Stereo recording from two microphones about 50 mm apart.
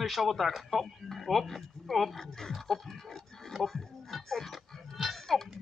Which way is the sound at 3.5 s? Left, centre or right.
Centre.